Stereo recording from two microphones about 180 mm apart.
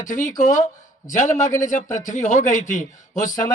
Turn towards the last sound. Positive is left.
turn(degrees=45)  # may be behind; listen again after turning